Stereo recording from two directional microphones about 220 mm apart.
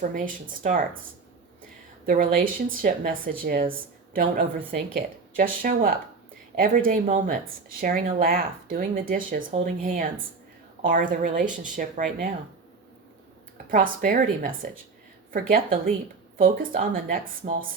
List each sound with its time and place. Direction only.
0.0 s speech: 35° right (ahead or behind)
2.0 s speech: 40° right (ahead or behind)
13.7 s speech: 40° right (ahead or behind)